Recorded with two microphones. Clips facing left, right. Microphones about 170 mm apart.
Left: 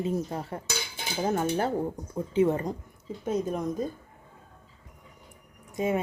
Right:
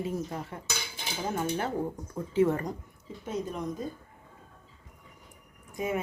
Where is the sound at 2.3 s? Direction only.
20° left (ahead or behind).